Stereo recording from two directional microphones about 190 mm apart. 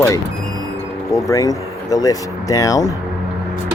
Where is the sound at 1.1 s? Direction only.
20° left (ahead or behind).